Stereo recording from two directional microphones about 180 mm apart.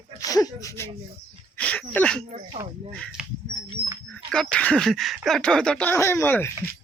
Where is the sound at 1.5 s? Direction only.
5° left (ahead or behind).